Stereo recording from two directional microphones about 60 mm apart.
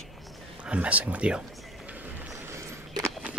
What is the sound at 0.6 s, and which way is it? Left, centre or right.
Speech, right.